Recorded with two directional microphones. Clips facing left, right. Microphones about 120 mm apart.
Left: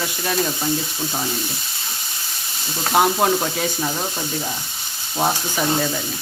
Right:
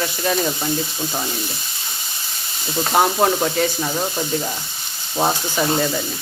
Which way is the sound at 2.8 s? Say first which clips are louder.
Right 1 dB; centre (ahead or behind).